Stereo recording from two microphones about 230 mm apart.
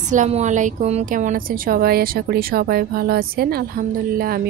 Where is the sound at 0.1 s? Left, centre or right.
Right.